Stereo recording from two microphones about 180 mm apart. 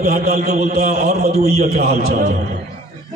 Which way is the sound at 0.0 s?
55° right (ahead or behind).